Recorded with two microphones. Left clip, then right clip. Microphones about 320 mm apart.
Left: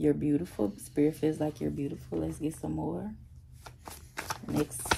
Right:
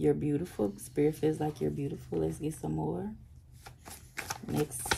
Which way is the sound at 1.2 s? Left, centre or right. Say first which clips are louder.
Even; centre.